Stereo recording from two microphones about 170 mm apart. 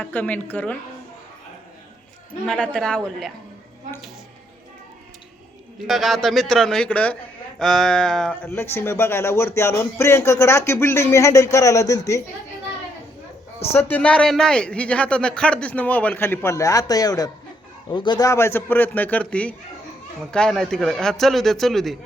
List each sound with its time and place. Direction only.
0.0 s speech: 10° left (ahead or behind)
2.5 s a man's voice: 5° left (ahead or behind)
5.9 s a man's voice: centre (ahead or behind); by 12.2 s 20° left (ahead or behind)
13.7 s a man's voice: 10° left (ahead or behind)